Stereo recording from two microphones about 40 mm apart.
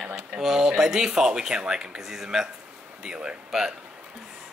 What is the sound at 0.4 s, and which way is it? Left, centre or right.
Speech, centre.